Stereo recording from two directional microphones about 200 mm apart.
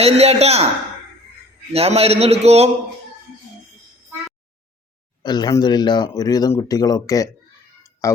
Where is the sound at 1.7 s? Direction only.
30° right (ahead or behind).